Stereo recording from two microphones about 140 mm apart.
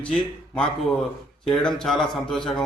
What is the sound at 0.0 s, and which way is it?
Speech, 5° left (ahead or behind).